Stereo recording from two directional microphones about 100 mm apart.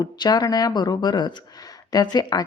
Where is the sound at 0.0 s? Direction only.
45° left (ahead or behind).